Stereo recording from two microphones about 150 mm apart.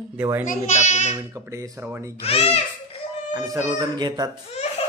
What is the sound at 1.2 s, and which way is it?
Speech, 20° right (ahead or behind).